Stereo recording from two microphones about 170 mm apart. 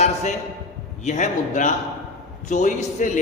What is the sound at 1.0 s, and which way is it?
A man's voice, 45° left (ahead or behind).